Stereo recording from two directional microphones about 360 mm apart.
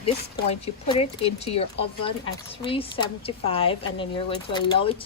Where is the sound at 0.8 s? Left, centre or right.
Centre.